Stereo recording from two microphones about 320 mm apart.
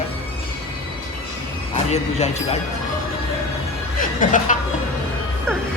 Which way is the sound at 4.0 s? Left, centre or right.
Left.